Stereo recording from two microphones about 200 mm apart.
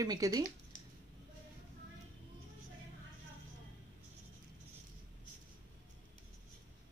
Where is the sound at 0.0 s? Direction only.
20° right (ahead or behind).